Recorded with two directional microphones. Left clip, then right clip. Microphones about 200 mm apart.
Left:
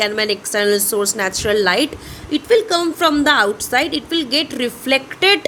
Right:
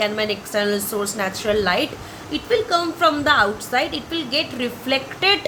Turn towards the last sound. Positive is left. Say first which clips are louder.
# left 4 dB
turn(degrees=55)  # may be behind; listen again after turning